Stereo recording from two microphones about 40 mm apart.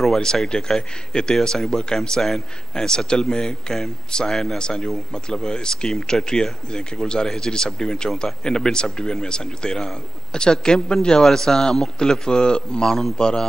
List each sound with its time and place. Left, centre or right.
0.0 s speech: centre